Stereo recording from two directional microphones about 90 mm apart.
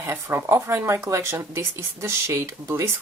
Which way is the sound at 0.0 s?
25° right (ahead or behind).